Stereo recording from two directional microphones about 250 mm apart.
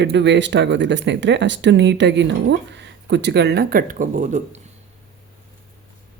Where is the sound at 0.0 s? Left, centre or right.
Right.